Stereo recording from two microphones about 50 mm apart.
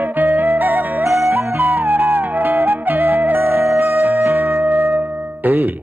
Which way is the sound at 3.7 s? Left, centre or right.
Right.